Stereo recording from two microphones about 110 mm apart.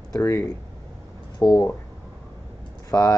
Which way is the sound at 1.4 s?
30° left (ahead or behind).